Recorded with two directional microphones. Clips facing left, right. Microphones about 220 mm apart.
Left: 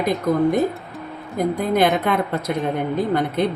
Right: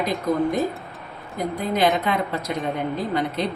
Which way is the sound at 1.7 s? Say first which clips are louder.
Left 1 dB; 55° left (ahead or behind).